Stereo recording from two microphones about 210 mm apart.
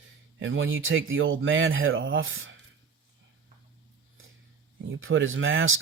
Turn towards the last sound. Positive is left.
turn(degrees=-70)  # may be behind; listen again after turning